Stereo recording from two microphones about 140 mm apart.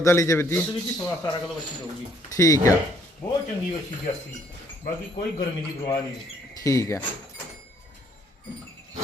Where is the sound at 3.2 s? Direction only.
10° left (ahead or behind).